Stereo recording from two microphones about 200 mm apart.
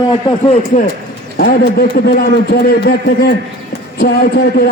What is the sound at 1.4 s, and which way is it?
A man's voice, 50° left (ahead or behind).